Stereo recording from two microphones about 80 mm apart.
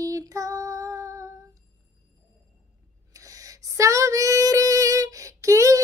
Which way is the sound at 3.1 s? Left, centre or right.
Right.